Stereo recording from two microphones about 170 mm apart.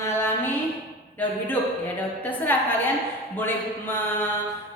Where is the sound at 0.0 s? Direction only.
15° left (ahead or behind).